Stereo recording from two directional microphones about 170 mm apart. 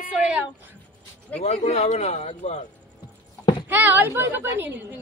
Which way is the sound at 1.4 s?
40° left (ahead or behind).